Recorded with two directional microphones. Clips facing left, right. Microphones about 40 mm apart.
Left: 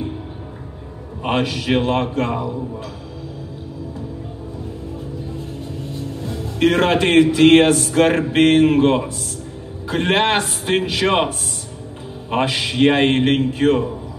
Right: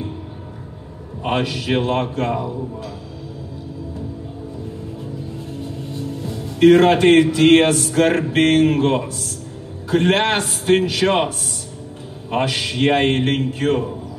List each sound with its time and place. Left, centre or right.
1.2 s speech: left
6.2 s speech: left